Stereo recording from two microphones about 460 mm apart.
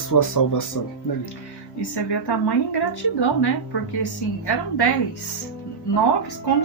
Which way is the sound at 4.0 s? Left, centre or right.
Left.